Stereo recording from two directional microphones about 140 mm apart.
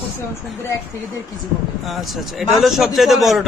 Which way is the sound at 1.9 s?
Centre (ahead or behind).